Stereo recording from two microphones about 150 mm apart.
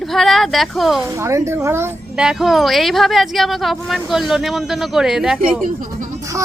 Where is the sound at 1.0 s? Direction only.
20° right (ahead or behind).